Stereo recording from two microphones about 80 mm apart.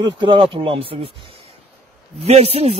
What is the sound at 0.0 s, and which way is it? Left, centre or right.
Speech, right.